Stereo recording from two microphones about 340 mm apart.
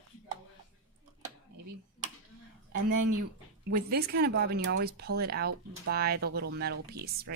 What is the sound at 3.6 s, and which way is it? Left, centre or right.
Speech, right.